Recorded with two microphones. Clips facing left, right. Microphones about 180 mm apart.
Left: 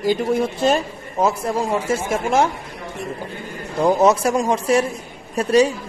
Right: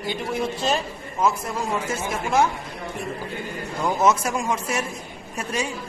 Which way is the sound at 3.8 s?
35° left (ahead or behind).